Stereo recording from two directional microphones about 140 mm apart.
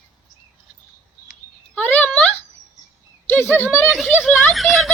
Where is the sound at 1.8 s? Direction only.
10° left (ahead or behind).